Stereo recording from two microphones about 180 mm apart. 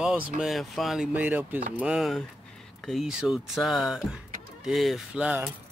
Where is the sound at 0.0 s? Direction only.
5° right (ahead or behind).